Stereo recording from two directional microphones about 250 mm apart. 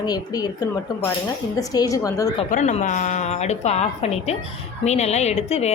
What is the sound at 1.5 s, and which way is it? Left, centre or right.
Speech, centre.